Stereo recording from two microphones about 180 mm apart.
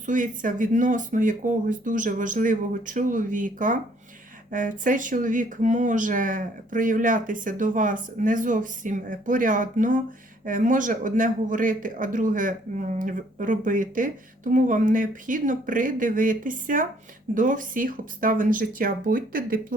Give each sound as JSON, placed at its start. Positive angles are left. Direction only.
{"t": 0.0, "sound": "a man's voice", "side_deg": -45}